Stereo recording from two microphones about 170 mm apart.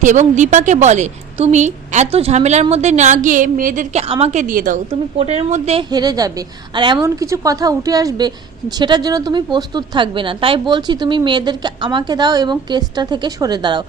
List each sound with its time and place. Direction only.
0.0 s a woman's voice: 45° right (ahead or behind)
4.0 s a woman's voice: 35° right (ahead or behind)
5.9 s a woman's voice: 25° right (ahead or behind)